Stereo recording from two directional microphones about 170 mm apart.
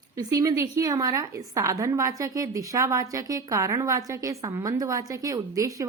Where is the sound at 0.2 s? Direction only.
20° right (ahead or behind).